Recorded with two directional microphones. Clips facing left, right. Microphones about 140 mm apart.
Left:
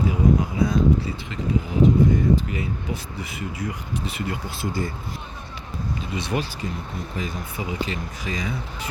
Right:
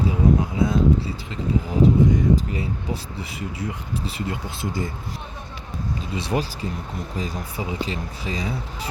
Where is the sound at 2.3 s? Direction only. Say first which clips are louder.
Even; 30° right (ahead or behind).